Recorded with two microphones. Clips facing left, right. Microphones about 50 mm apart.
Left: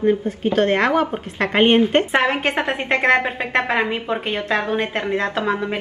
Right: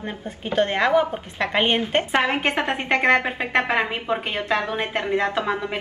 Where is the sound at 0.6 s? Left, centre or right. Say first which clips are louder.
Left 1 dB; left.